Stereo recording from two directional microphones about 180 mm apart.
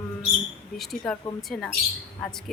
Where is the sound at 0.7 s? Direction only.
Centre (ahead or behind).